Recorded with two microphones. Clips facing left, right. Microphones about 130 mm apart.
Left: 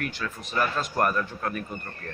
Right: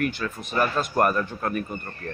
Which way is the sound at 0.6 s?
5° right (ahead or behind).